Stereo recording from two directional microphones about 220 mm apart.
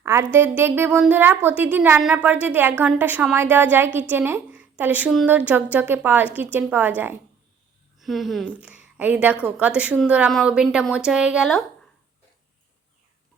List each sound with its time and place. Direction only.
0.0 s a woman's voice: 10° right (ahead or behind)